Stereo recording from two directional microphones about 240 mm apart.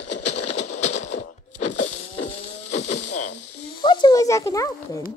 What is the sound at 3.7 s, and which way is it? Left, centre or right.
Speech, centre.